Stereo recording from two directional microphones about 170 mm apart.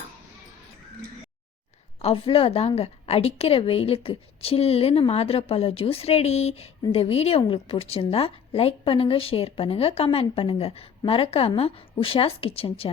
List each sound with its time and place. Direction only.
2.0 s a woman's voice: 35° left (ahead or behind)